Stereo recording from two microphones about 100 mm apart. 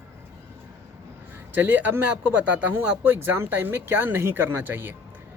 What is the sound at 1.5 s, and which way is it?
Speech, 15° right (ahead or behind).